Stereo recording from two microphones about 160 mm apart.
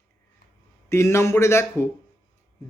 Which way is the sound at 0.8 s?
15° left (ahead or behind).